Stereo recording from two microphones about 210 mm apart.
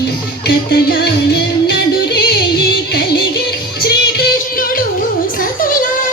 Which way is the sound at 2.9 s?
50° left (ahead or behind).